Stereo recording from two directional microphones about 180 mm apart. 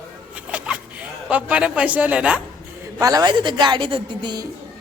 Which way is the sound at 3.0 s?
20° right (ahead or behind).